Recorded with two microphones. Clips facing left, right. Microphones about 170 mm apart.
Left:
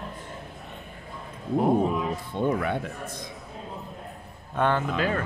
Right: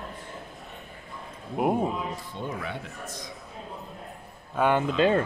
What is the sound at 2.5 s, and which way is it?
Speech, 55° left (ahead or behind).